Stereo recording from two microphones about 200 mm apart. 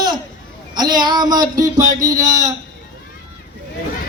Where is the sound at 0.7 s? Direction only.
20° right (ahead or behind).